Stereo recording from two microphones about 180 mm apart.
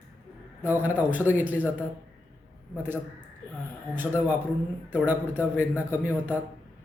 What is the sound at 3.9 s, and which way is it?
A man's voice, 10° right (ahead or behind).